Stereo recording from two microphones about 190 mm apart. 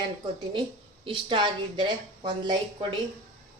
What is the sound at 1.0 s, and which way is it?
A woman's voice, 25° right (ahead or behind).